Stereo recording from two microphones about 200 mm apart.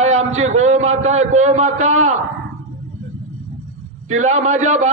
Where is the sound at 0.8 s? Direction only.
90° right.